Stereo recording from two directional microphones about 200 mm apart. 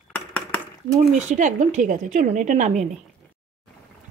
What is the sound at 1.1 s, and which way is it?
A woman's voice, 40° right (ahead or behind).